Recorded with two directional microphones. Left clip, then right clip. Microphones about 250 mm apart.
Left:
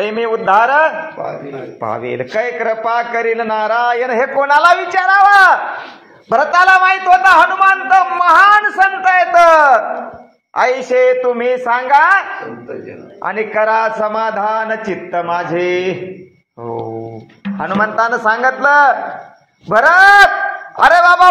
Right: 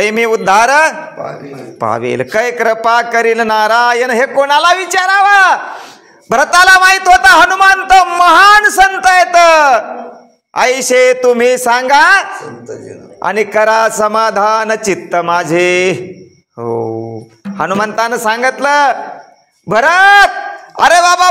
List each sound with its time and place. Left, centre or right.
0.0 s a man's voice: right
17.6 s a man's voice: right